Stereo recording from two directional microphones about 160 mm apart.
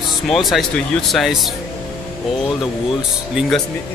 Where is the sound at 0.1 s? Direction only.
Centre (ahead or behind).